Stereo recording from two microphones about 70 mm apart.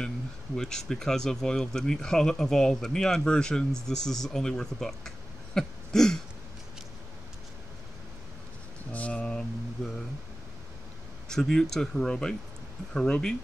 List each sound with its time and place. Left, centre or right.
0.6 s speech: centre
8.9 s mantra: centre
11.2 s speech: centre